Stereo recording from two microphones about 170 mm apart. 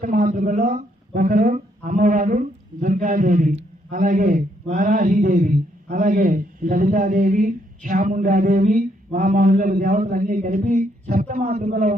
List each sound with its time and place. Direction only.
0.0 s speech: 50° right (ahead or behind)